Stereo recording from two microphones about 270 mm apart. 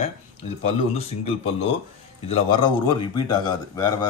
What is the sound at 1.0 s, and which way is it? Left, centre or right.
Speech, left.